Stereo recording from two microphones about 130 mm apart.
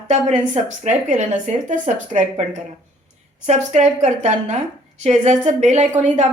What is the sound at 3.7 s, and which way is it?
A woman's voice, 60° right (ahead or behind).